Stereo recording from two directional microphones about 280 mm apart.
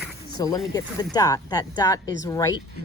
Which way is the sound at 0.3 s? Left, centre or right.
Centre.